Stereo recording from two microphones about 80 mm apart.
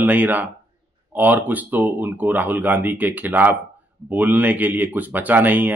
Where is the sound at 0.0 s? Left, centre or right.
Right.